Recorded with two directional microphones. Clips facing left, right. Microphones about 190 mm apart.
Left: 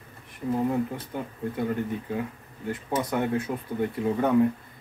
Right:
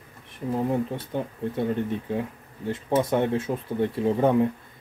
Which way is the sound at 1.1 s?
25° right (ahead or behind).